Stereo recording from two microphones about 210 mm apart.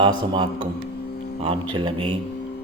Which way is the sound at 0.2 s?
20° right (ahead or behind).